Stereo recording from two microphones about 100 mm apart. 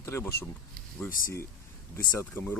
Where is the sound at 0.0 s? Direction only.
30° left (ahead or behind).